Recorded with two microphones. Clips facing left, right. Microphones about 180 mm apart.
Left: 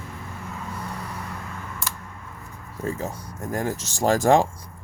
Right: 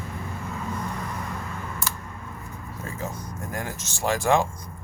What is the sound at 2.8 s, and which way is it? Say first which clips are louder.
Speech: left 5 dB; 35° left (ahead or behind).